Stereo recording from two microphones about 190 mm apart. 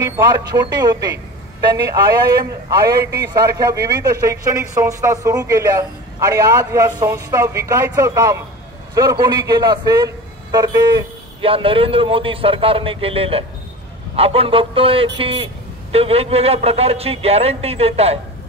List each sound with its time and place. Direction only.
0.2 s a man's voice: 20° right (ahead or behind)
2.8 s a man's voice: 20° right (ahead or behind)